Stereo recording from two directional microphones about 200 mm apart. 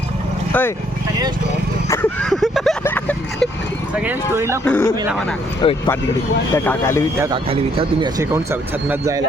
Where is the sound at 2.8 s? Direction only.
10° left (ahead or behind).